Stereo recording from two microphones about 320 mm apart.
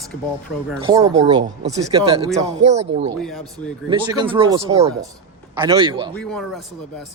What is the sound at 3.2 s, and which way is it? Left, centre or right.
Speech, centre.